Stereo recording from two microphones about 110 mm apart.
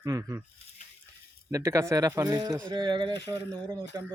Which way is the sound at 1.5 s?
25° right (ahead or behind).